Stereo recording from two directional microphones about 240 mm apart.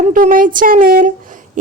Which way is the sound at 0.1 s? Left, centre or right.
Right.